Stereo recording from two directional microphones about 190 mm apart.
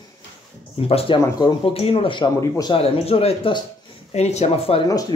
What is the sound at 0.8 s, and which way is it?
Speech, 30° left (ahead or behind).